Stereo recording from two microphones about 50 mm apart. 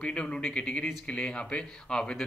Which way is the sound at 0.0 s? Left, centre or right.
Centre.